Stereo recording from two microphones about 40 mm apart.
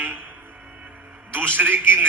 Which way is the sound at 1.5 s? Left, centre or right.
Right.